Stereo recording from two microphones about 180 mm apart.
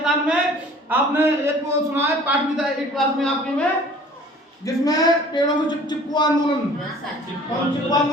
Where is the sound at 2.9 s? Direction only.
5° left (ahead or behind).